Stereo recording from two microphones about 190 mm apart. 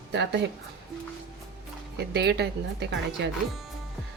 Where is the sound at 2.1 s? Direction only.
60° right (ahead or behind).